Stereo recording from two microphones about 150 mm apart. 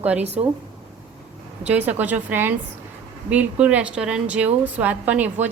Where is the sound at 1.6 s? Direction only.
10° right (ahead or behind).